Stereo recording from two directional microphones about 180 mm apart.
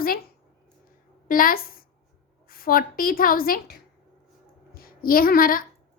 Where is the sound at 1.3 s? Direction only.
50° left (ahead or behind).